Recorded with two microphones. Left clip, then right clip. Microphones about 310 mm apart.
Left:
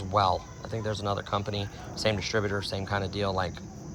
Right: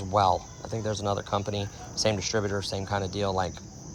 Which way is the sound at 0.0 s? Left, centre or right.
Centre.